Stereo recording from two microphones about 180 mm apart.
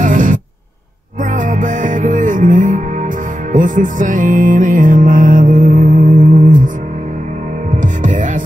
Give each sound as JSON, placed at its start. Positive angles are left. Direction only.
{"t": 0.0, "sound": "music", "side_deg": -45}
{"t": 7.8, "sound": "hum", "side_deg": -45}